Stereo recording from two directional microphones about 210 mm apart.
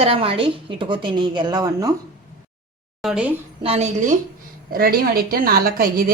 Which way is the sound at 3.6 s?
30° right (ahead or behind).